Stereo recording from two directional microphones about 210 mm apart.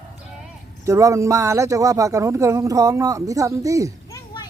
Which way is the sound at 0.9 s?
15° right (ahead or behind).